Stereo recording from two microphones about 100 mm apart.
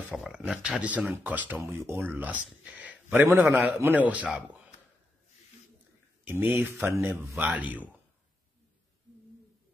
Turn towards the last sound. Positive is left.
turn(degrees=-15)  # may be behind; listen again after turning